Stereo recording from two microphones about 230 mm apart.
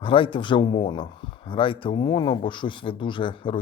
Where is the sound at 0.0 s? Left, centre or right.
Left.